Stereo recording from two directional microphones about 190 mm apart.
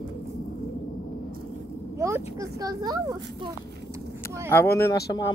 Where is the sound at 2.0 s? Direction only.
15° right (ahead or behind).